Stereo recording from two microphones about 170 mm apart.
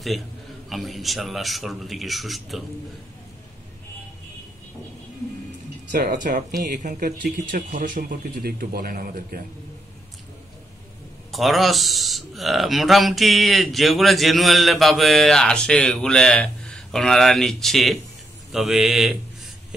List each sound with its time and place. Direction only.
0.7 s speech: centre (ahead or behind)
5.9 s speech: 50° right (ahead or behind)
11.3 s speech: centre (ahead or behind)